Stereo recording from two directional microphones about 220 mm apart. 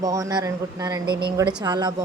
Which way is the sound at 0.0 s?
15° right (ahead or behind).